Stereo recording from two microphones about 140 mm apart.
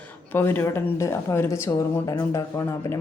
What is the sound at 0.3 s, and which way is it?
A woman's voice, 15° left (ahead or behind).